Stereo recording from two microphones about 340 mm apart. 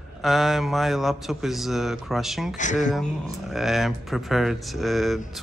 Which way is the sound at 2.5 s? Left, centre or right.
Left.